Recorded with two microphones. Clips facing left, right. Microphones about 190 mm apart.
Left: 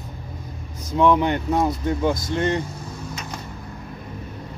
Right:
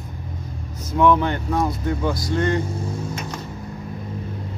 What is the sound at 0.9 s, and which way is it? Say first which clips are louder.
Speech: even; 15° left (ahead or behind).